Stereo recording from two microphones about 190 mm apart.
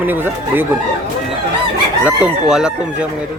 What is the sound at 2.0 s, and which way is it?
Speech, 5° right (ahead or behind).